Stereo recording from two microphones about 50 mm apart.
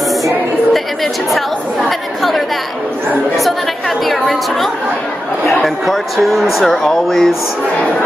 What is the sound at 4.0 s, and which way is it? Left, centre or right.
Chatter, centre.